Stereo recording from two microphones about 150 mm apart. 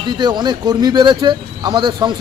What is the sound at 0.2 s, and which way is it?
Speech, 30° right (ahead or behind).